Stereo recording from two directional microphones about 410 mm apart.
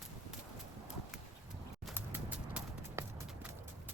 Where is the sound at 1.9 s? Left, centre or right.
Centre.